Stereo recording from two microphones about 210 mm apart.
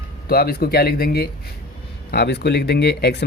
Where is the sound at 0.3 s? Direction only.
45° left (ahead or behind).